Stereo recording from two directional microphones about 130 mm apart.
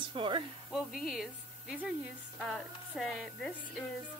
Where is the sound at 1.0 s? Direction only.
Centre (ahead or behind).